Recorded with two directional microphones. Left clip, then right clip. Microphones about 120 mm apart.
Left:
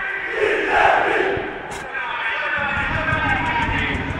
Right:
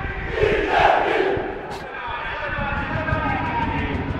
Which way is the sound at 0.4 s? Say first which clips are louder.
Even; 35° left (ahead or behind).